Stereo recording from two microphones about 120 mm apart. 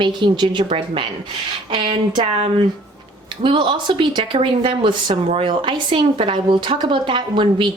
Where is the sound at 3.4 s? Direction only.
45° right (ahead or behind).